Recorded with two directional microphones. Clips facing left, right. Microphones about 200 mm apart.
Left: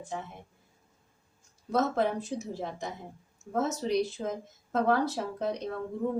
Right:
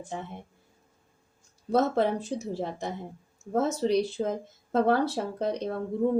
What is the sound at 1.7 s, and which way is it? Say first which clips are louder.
A woman's voice: right 3 dB; 30° right (ahead or behind).